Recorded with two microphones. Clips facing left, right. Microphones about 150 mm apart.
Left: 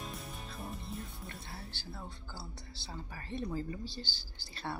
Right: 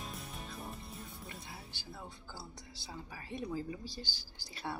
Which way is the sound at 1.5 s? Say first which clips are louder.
Left 2 dB; 15° right (ahead or behind).